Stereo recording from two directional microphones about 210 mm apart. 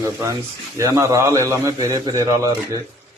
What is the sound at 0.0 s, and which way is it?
A man's voice, 15° right (ahead or behind).